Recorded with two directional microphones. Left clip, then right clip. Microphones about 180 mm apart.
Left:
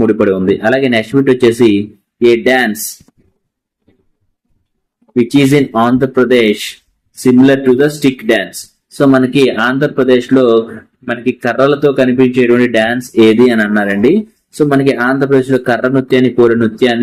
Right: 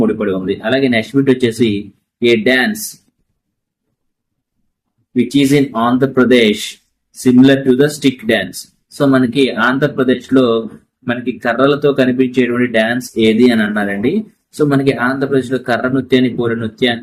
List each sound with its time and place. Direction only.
0.0 s speech: 30° left (ahead or behind)
5.3 s speech: 25° left (ahead or behind)